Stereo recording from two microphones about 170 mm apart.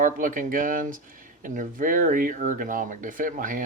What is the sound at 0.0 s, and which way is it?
Speech, 50° right (ahead or behind).